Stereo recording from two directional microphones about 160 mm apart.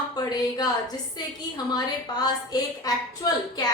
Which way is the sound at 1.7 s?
25° left (ahead or behind).